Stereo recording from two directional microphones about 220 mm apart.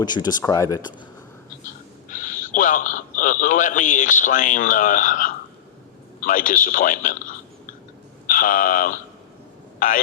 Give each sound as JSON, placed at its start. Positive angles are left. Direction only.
{"t": 0.0, "sound": "speech", "side_deg": 20}
{"t": 2.0, "sound": "a man's voice", "side_deg": 35}